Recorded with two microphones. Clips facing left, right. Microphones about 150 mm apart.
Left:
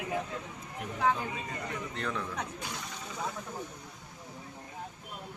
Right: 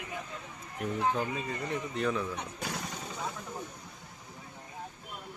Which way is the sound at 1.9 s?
10° right (ahead or behind).